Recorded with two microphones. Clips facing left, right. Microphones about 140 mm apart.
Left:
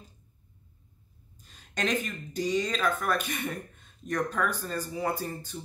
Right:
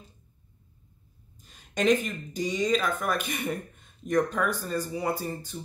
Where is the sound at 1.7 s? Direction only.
10° right (ahead or behind).